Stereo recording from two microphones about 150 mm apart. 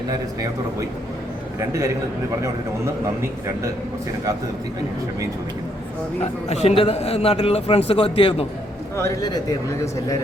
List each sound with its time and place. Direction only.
1.5 s a man's voice: 20° right (ahead or behind)
6.5 s a man's voice: 45° left (ahead or behind)
9.0 s a man's voice: 20° left (ahead or behind)